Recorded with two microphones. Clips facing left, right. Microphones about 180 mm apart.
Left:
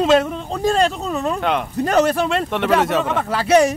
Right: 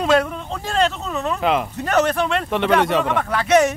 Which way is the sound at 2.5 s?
Centre (ahead or behind).